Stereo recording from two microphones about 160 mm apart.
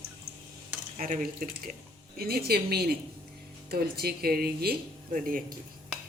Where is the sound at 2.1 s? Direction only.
70° right (ahead or behind).